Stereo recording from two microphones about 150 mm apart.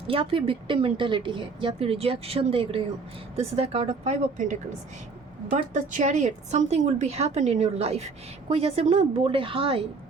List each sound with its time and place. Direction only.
0.1 s speech: 35° right (ahead or behind)